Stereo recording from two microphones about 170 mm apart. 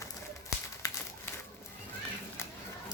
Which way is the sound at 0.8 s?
20° left (ahead or behind).